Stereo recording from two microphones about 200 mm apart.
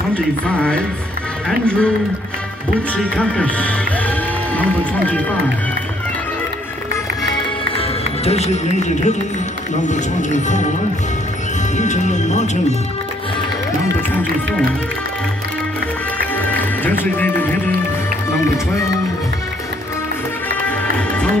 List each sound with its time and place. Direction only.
0.1 s speech: 5° left (ahead or behind)
3.2 s speech: 5° left (ahead or behind)
8.3 s speech: 35° left (ahead or behind)
11.7 s speech: 35° left (ahead or behind)
16.3 s music: 10° left (ahead or behind)